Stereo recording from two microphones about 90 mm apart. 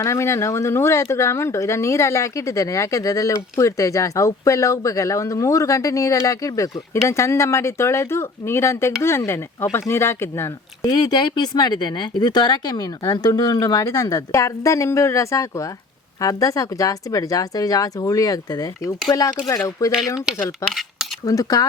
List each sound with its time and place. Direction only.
0.0 s speech: 35° left (ahead or behind)
10.8 s speech: 55° left (ahead or behind)
20.7 s cutlery: centre (ahead or behind)
21.2 s speech: 40° left (ahead or behind)